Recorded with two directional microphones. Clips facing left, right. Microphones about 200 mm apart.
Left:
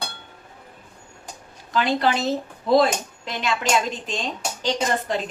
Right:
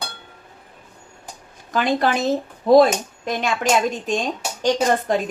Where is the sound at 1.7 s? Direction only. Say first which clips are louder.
Right 2 dB; 50° right (ahead or behind).